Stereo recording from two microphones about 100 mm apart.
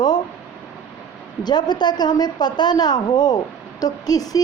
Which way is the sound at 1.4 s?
45° left (ahead or behind).